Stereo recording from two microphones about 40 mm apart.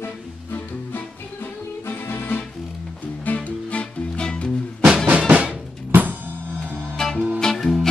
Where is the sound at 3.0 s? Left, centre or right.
Left.